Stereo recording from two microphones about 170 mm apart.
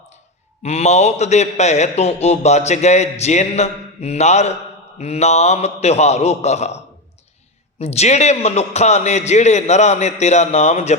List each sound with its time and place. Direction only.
0.6 s a man's voice: 40° left (ahead or behind)
7.8 s a man's voice: 40° left (ahead or behind)